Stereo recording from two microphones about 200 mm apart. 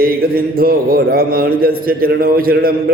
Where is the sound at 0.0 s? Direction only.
45° right (ahead or behind).